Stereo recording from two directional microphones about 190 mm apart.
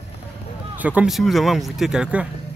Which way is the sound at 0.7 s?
10° right (ahead or behind).